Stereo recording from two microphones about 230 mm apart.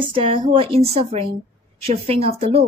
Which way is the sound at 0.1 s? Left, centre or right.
Right.